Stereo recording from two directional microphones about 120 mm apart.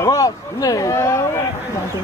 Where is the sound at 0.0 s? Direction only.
30° left (ahead or behind).